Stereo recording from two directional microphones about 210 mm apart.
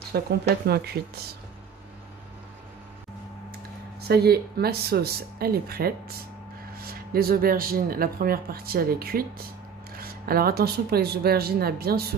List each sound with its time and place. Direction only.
0.1 s speech: 50° right (ahead or behind)
4.1 s speech: 50° right (ahead or behind)